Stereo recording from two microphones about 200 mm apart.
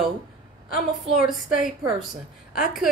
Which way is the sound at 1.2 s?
Centre (ahead or behind).